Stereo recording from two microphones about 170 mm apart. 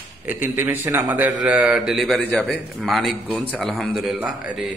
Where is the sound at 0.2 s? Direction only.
10° right (ahead or behind).